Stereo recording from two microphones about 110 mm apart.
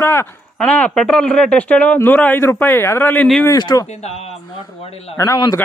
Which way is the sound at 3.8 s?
80° left.